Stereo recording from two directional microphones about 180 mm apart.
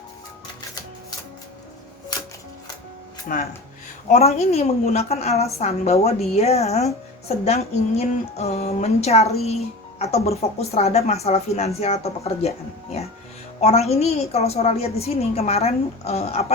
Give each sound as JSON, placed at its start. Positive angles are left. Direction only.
{"t": 3.3, "sound": "speech", "side_deg": 50}
{"t": 4.1, "sound": "speech", "side_deg": 35}